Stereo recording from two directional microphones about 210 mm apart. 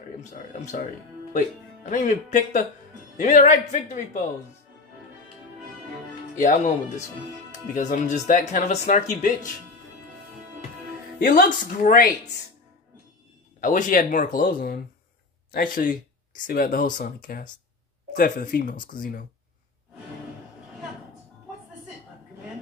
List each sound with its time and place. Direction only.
0.2 s speech: 35° left (ahead or behind)
6.3 s speech: 35° left (ahead or behind)
11.1 s speech: 45° left (ahead or behind)
13.6 s speech: 40° left (ahead or behind)